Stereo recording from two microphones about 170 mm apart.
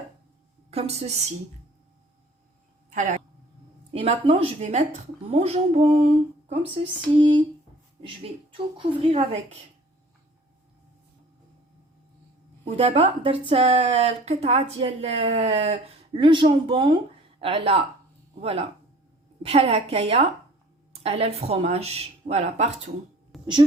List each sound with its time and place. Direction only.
0.7 s speech: 35° right (ahead or behind)
2.9 s speech: 45° right (ahead or behind)
3.9 s speech: 35° right (ahead or behind)
12.6 s speech: 35° right (ahead or behind)
23.3 s a sound: centre (ahead or behind)